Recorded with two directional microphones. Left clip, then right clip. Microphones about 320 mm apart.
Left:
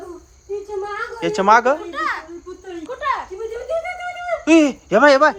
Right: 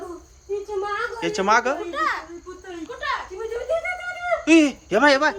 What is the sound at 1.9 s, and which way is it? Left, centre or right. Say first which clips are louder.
Insect: left 1 dB; centre.